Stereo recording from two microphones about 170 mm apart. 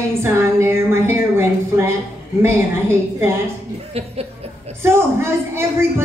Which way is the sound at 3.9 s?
35° right (ahead or behind).